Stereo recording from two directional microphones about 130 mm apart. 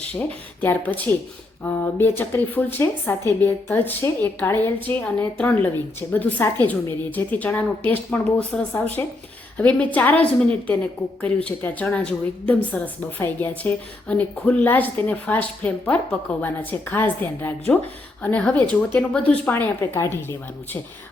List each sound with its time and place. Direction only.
0.1 s speech: 15° left (ahead or behind)